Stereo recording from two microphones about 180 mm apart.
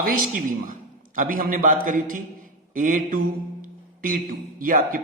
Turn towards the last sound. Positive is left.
turn(degrees=-50)  # may be behind; listen again after turning